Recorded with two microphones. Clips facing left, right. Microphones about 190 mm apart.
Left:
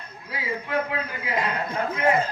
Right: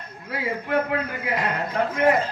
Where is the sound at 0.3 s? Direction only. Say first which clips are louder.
Right 4 dB; 60° right (ahead or behind).